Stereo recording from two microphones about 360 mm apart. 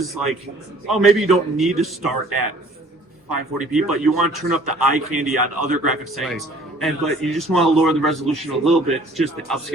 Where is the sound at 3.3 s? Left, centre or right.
Right.